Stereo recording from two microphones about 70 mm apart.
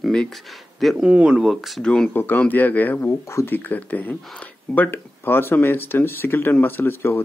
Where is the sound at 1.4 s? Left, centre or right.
Centre.